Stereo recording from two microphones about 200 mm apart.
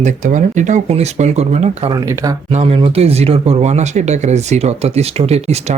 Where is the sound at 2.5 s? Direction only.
30° right (ahead or behind).